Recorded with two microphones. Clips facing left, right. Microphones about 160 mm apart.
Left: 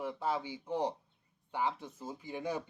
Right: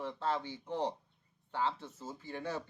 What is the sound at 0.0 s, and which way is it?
Speech, 10° left (ahead or behind).